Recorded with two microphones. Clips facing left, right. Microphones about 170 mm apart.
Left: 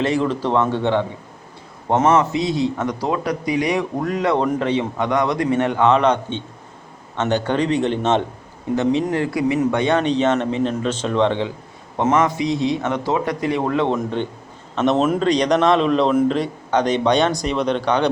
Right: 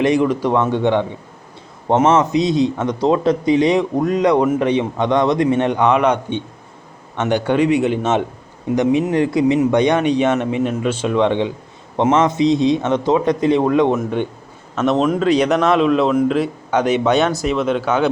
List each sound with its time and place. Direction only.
0.0 s speech: 15° right (ahead or behind)
2.0 s a man's voice: 20° right (ahead or behind)
14.8 s a man's voice: centre (ahead or behind)